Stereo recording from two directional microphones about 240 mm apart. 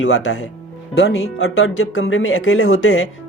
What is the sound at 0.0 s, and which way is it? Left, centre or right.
Speech, left.